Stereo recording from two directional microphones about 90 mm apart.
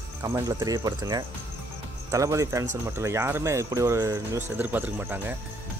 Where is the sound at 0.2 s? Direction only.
40° right (ahead or behind).